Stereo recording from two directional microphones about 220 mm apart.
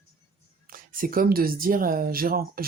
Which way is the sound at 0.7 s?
40° right (ahead or behind).